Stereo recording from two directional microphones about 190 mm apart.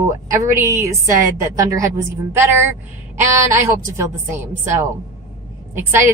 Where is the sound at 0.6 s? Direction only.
15° right (ahead or behind).